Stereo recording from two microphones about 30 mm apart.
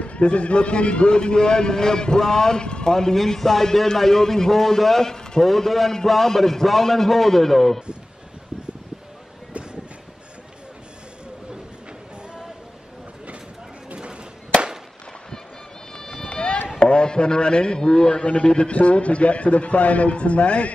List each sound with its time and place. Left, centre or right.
0.0 s a man's voice: left; by 2.6 s centre
2.6 s a man's voice: left
2.9 s a man's voice: centre
5.1 s a sound: left
5.4 s a man's voice: centre
16.3 s run: left
16.8 s a man's voice: left
18.2 s a man's voice: left